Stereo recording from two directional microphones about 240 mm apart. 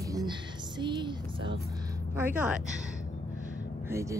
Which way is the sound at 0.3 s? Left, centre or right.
Centre.